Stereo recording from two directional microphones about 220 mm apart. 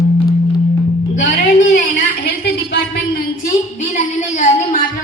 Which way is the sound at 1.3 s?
40° left (ahead or behind).